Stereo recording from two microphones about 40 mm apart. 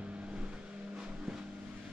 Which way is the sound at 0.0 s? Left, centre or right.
Right.